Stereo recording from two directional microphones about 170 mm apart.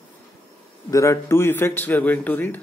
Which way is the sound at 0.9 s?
15° left (ahead or behind).